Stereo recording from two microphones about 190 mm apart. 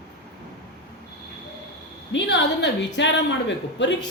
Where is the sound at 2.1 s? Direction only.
70° left (ahead or behind).